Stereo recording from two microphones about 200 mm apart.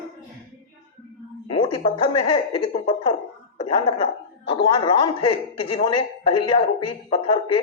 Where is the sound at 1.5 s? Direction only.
25° left (ahead or behind).